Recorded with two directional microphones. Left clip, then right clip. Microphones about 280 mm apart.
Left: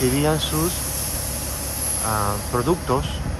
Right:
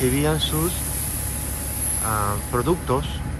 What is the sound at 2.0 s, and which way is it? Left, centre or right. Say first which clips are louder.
Speech: left 1 dB; centre.